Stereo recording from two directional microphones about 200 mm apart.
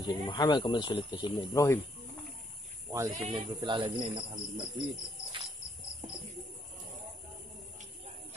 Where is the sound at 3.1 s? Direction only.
30° right (ahead or behind).